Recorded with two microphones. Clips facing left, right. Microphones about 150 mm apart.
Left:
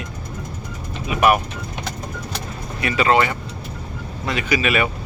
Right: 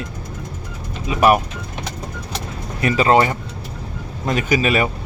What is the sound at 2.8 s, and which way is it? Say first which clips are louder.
Speech: right 3 dB; 35° right (ahead or behind).